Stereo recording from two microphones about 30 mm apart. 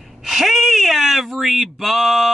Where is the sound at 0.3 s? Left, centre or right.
Centre.